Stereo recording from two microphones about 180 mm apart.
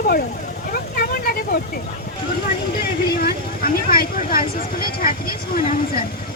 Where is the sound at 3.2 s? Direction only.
55° left (ahead or behind).